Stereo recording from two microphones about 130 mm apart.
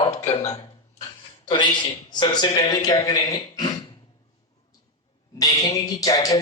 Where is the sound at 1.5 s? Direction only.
35° left (ahead or behind).